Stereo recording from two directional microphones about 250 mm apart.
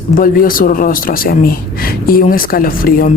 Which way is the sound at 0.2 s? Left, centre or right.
Left.